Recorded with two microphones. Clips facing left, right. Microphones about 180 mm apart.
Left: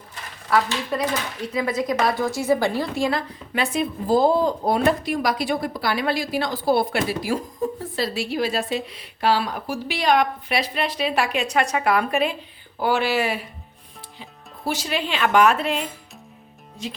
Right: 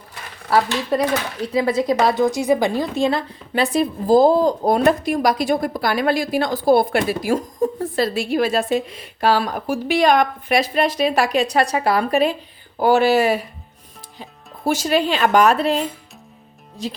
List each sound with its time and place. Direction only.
0.5 s a woman's voice: 35° right (ahead or behind)
16.8 s a woman's voice: 35° right (ahead or behind)